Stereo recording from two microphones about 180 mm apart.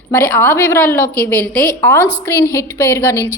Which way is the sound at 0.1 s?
10° left (ahead or behind).